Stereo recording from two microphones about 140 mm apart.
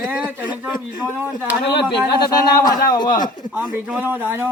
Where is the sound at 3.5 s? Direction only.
10° right (ahead or behind).